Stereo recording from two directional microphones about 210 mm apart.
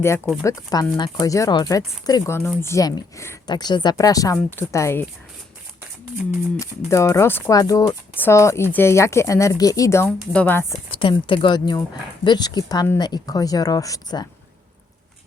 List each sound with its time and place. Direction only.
0.4 s speech: 20° left (ahead or behind)
6.6 s speech: 15° left (ahead or behind)
10.1 s speech: 5° left (ahead or behind)
10.9 s speech: 25° left (ahead or behind)